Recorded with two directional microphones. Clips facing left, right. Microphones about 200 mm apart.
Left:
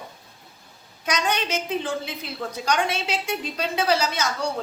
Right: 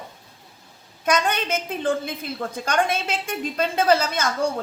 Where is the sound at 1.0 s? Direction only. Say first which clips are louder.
Right 3 dB; 55° right (ahead or behind).